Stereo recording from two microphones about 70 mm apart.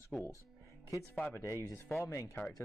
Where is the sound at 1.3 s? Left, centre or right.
Left.